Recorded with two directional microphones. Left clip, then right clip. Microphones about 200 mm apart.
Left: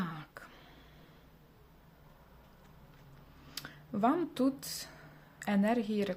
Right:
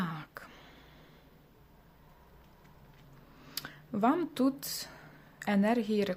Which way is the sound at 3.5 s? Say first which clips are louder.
Right 2 dB; 10° right (ahead or behind).